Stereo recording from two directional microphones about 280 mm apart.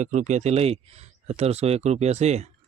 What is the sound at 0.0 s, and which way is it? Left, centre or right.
Speech, right.